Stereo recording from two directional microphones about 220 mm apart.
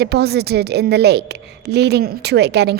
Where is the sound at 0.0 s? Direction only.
45° right (ahead or behind).